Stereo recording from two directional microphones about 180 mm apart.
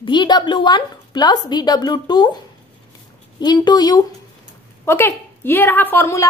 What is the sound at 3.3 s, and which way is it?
A woman's voice, 25° left (ahead or behind).